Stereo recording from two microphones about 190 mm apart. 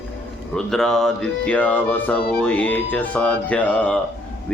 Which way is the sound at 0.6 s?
Centre (ahead or behind).